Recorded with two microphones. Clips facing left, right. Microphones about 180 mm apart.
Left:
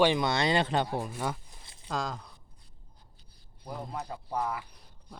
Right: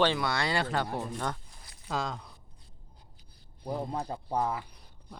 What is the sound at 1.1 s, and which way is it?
Speech, 10° left (ahead or behind).